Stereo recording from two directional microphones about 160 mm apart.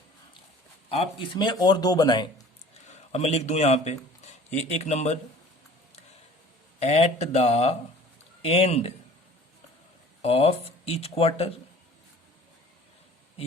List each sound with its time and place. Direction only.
0.9 s speech: 35° left (ahead or behind)
3.1 s speech: 40° left (ahead or behind)
6.7 s speech: 40° left (ahead or behind)
10.2 s speech: 40° left (ahead or behind)